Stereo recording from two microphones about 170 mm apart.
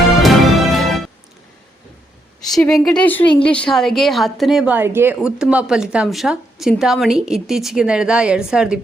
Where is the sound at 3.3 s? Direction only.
30° left (ahead or behind).